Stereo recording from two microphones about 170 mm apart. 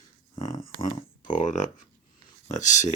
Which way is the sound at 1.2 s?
50° left (ahead or behind).